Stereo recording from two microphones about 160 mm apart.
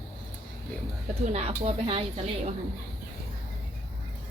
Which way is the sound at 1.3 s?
40° right (ahead or behind).